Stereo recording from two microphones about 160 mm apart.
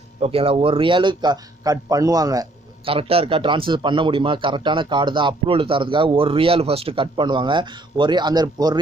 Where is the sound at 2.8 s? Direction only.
35° right (ahead or behind).